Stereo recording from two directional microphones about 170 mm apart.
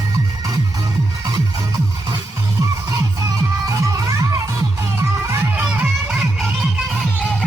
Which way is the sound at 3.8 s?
20° right (ahead or behind).